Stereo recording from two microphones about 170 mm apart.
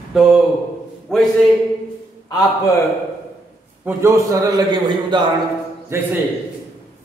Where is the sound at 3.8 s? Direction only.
15° right (ahead or behind).